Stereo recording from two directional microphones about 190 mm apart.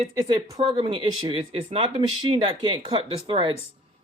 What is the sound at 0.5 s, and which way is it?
Speech, 30° right (ahead or behind).